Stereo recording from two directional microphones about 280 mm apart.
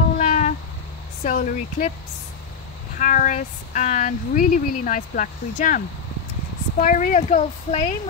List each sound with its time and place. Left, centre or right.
0.2 s cat: left
1.2 s speech: left
3.0 s speech: left
6.8 s speech: left